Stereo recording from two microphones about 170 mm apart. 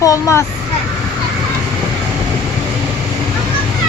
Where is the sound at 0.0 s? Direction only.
20° left (ahead or behind).